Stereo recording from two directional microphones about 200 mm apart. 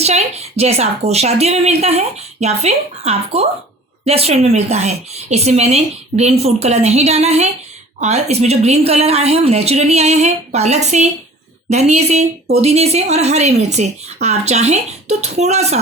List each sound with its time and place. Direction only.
0.0 s speech: 30° right (ahead or behind)